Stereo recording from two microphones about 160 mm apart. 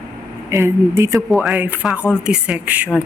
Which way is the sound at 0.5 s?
15° right (ahead or behind).